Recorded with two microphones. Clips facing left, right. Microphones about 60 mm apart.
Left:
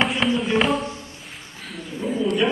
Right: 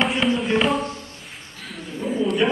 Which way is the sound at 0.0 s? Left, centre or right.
Centre.